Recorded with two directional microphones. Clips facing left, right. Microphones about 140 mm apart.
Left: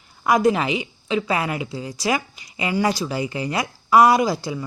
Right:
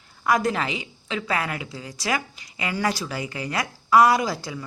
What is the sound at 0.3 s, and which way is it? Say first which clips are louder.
A woman's voice: left 5 dB; 15° left (ahead or behind).